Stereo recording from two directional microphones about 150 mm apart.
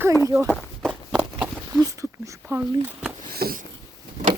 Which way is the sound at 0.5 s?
Centre (ahead or behind).